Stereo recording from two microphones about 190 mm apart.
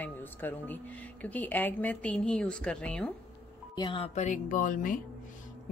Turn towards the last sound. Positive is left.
turn(degrees=45)  # may be behind; listen again after turning